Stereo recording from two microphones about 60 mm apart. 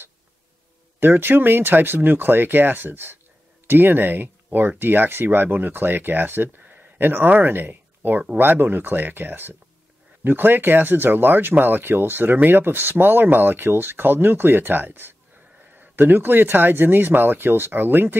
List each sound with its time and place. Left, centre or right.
0.9 s speech: right